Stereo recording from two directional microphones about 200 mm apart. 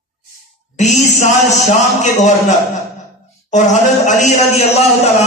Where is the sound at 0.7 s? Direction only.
35° left (ahead or behind).